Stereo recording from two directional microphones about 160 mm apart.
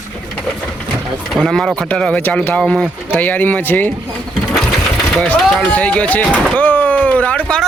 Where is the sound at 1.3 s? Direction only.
Centre (ahead or behind).